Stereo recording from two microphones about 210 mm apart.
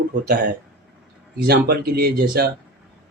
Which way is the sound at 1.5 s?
50° right (ahead or behind).